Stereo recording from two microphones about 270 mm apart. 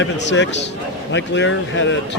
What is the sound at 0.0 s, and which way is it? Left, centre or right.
A man's voice, left.